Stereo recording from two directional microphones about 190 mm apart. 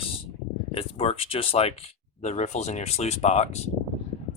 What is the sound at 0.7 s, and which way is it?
Speech, 30° left (ahead or behind).